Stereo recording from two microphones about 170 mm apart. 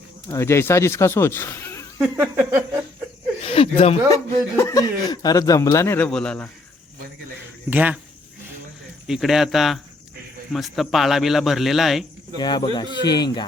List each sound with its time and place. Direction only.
0.3 s speech: 15° left (ahead or behind)
2.0 s a sound: 10° right (ahead or behind)
3.4 s speech: 35° left (ahead or behind)
4.1 s a man's voice: 20° left (ahead or behind)
6.1 s speech: 5° left (ahead or behind)
7.7 s a sound: 10° right (ahead or behind)
9.0 s speech: centre (ahead or behind)
12.4 s a man's voice: 25° left (ahead or behind)